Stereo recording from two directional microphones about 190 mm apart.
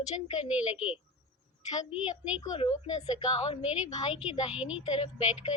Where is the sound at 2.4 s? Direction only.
30° left (ahead or behind).